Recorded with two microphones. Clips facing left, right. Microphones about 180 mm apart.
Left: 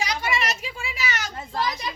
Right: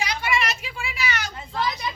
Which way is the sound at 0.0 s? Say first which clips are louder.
Right 1 dB; 40° left (ahead or behind).